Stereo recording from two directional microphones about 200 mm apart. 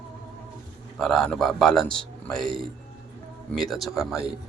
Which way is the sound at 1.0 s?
Centre (ahead or behind).